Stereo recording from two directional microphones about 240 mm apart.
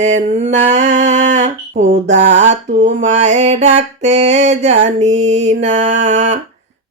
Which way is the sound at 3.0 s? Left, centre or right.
Right.